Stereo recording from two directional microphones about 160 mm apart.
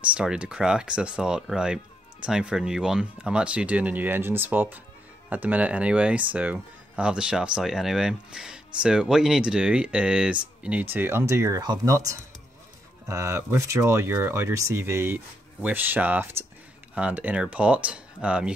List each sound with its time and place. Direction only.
0.1 s speech: 5° right (ahead or behind)